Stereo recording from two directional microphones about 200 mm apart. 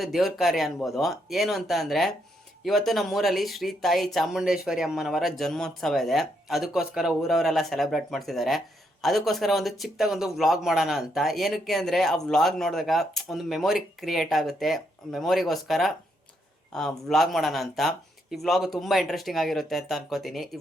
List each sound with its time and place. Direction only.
0.0 s speech: centre (ahead or behind)